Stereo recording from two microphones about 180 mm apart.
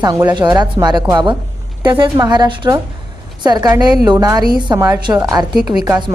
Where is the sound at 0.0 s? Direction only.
20° right (ahead or behind).